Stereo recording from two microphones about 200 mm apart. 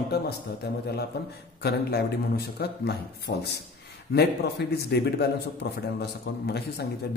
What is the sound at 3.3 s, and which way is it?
Speech, 40° left (ahead or behind).